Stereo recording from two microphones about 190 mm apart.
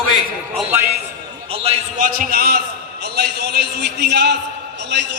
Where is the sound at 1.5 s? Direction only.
30° right (ahead or behind).